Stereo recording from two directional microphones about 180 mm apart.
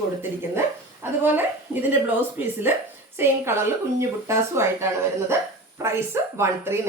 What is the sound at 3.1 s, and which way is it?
A woman's voice, 15° right (ahead or behind).